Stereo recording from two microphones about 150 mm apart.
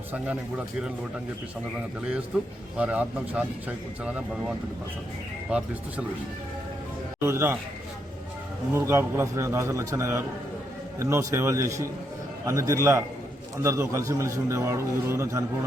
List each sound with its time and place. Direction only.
2.7 s speech: 10° right (ahead or behind)
7.3 s speech: 15° right (ahead or behind)
8.7 s a man's voice: 20° right (ahead or behind)